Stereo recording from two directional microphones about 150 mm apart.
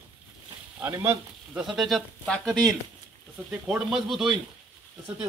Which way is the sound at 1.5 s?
Centre (ahead or behind).